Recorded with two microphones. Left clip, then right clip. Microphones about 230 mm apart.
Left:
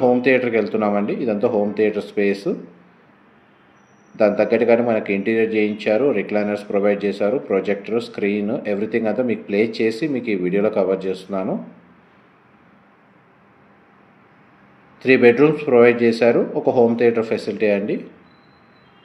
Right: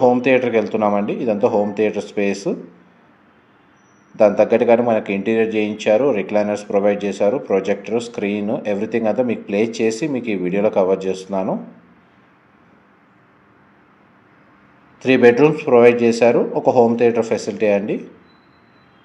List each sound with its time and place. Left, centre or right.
0.0 s speech: right
4.2 s speech: right
15.0 s speech: right